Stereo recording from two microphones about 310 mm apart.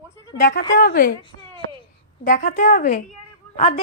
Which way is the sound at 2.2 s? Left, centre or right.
Left.